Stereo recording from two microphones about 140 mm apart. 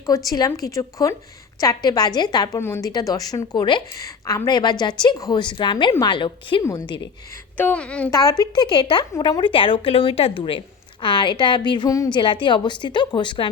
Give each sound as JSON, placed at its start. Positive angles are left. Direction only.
{"t": 0.3, "sound": "a woman's voice", "side_deg": 25}
{"t": 2.6, "sound": "a woman's voice", "side_deg": 20}
{"t": 6.6, "sound": "a woman's voice", "side_deg": 20}
{"t": 6.8, "sound": "a woman's voice", "side_deg": 35}
{"t": 7.5, "sound": "a woman's voice", "side_deg": 10}
{"t": 8.1, "sound": "a woman's voice", "side_deg": 25}